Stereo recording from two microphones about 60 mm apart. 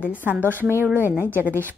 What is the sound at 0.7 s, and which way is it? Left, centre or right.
Speech, right.